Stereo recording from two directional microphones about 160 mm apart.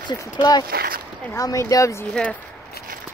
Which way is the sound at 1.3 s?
20° left (ahead or behind).